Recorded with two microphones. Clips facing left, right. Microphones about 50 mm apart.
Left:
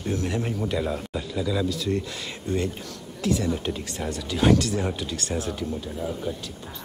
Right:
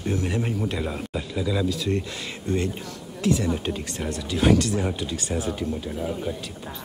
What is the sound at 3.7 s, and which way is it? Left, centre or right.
Speech, right.